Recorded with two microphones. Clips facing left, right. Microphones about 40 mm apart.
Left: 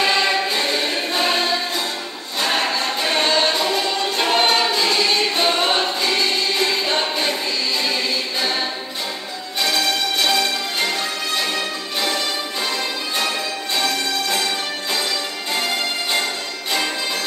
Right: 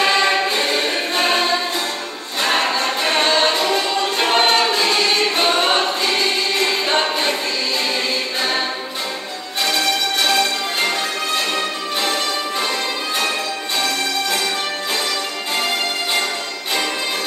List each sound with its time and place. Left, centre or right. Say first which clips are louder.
0.0 s music: right 2 dB; centre
2.4 s choir: right 2 dB; centre
6.6 s a capella: right 2 dB; right
8.4 s a capella: right 2 dB; right
9.6 s music: right 1 dB; centre